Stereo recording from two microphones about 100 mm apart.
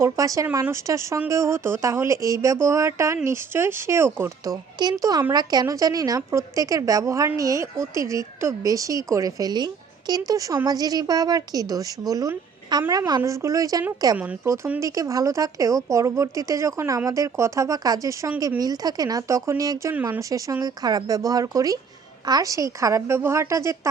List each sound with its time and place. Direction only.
0.0 s speech: 35° right (ahead or behind)
4.8 s speech: 40° right (ahead or behind)
19.9 s speech: 20° right (ahead or behind)
20.3 s speech: 35° right (ahead or behind)